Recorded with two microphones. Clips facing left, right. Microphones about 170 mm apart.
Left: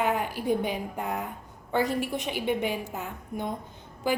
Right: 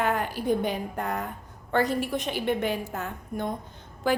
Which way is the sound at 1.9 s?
15° left (ahead or behind).